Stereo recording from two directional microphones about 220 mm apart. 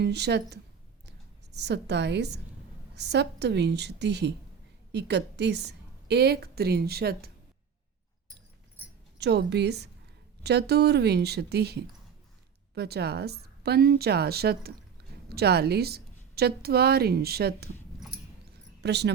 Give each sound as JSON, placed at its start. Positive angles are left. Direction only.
{"t": 0.0, "sound": "a woman's voice", "side_deg": -50}
{"t": 9.1, "sound": "a woman's voice", "side_deg": -50}
{"t": 18.5, "sound": "a sound", "side_deg": -50}